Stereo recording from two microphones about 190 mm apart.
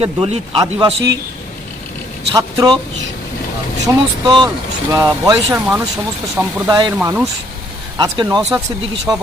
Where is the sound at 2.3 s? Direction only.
20° right (ahead or behind).